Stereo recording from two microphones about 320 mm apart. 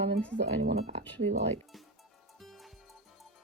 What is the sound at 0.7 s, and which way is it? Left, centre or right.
Speech, centre.